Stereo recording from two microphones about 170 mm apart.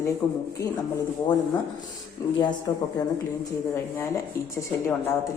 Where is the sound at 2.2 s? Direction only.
20° left (ahead or behind).